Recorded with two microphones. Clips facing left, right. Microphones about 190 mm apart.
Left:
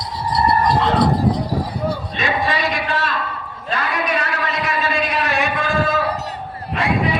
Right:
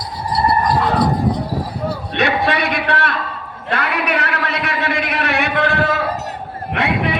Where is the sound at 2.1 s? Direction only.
65° right (ahead or behind).